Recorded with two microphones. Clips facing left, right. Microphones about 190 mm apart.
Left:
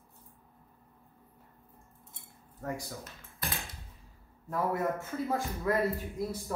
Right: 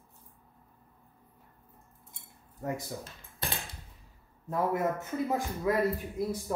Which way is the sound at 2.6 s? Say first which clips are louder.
Right 3 dB; 25° right (ahead or behind).